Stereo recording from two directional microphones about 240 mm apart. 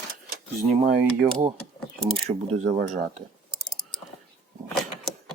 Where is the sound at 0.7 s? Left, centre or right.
Right.